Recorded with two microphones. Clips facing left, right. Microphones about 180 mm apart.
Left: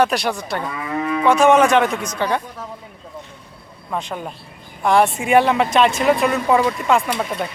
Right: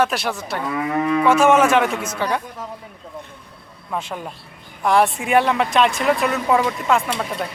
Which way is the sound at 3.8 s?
Centre (ahead or behind).